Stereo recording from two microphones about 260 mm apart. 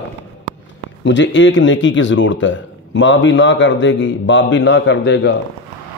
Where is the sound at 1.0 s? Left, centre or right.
Left.